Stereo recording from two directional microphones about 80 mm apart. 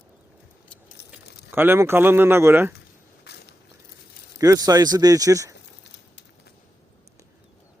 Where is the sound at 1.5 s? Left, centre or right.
Right.